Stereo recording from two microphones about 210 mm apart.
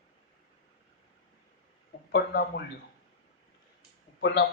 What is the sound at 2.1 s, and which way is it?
Speech, 50° left (ahead or behind).